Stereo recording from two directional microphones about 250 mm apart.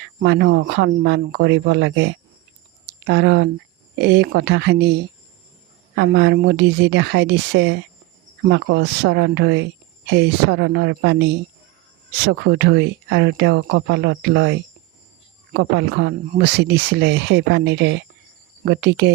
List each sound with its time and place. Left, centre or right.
0.0 s speech: right